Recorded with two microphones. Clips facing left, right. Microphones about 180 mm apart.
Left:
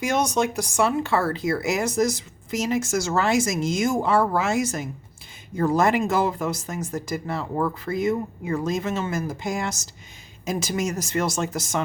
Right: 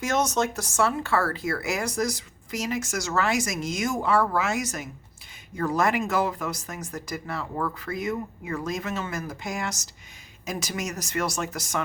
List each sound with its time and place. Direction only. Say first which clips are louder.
0.0 s speech: left 2 dB; 10° left (ahead or behind)